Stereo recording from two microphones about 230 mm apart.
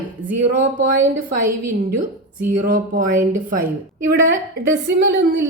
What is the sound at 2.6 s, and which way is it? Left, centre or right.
Speech, right.